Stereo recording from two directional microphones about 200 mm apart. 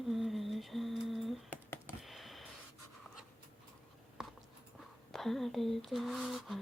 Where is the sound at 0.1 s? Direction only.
Centre (ahead or behind).